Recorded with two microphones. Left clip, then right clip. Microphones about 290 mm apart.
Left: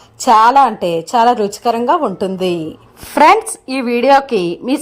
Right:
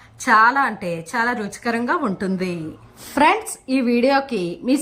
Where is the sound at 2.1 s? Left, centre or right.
Left.